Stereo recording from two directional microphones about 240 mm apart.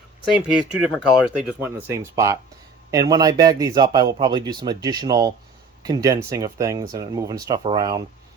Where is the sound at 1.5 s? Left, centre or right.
Centre.